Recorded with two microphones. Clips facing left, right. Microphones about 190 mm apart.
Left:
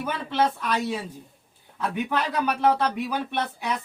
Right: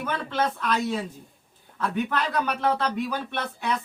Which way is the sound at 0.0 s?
10° left (ahead or behind).